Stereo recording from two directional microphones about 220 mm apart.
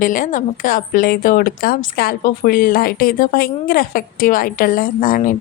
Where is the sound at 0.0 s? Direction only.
40° left (ahead or behind).